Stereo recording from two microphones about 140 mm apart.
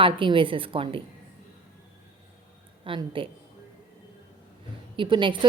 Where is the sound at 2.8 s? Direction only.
40° right (ahead or behind).